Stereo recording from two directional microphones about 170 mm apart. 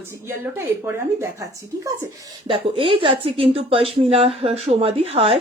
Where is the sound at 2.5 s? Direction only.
30° right (ahead or behind).